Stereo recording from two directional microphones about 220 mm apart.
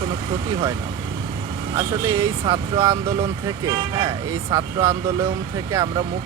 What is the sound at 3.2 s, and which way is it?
Speech, 15° right (ahead or behind).